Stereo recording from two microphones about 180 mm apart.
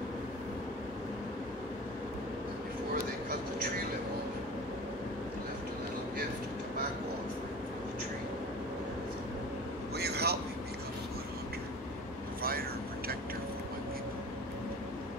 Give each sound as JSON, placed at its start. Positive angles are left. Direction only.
{"t": 9.9, "sound": "vehicle", "side_deg": -65}
{"t": 12.4, "sound": "vehicle", "side_deg": -55}